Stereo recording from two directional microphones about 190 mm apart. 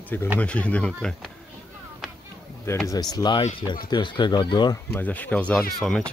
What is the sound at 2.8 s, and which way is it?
Speech, 20° left (ahead or behind).